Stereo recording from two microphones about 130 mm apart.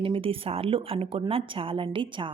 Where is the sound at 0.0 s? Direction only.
45° right (ahead or behind).